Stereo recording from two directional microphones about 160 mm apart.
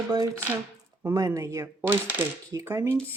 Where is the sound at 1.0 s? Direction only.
15° right (ahead or behind).